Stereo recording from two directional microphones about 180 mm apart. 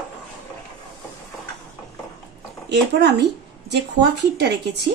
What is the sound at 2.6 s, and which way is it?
Speech, 70° right (ahead or behind).